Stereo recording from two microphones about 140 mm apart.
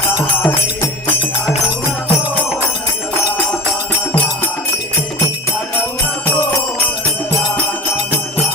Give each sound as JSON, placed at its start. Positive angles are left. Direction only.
{"t": 0.2, "sound": "music", "side_deg": 20}